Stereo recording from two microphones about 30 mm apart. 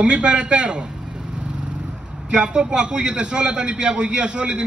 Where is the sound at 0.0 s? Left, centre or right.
Right.